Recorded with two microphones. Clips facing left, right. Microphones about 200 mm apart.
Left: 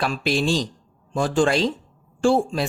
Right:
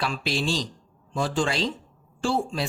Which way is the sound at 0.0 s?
50° left (ahead or behind).